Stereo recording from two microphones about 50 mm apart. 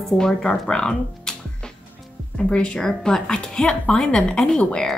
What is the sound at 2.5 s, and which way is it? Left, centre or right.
A woman's voice, left.